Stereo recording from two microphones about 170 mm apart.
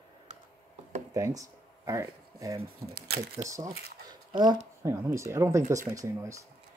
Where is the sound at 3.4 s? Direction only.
20° right (ahead or behind).